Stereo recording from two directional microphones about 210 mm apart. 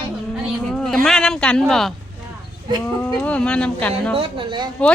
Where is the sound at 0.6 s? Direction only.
5° left (ahead or behind).